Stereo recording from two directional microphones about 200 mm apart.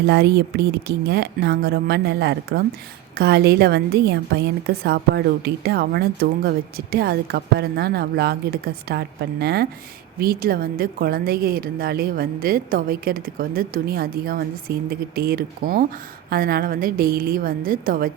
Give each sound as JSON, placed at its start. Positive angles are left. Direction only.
{"t": 0.0, "sound": "a woman's voice", "side_deg": -55}